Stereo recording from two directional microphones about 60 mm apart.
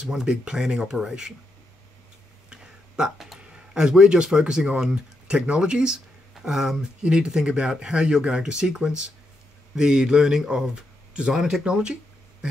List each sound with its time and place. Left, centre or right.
0.0 s speech: centre
2.5 s speech: centre